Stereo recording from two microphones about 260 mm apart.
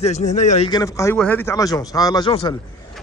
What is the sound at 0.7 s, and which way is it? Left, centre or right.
Speech, centre.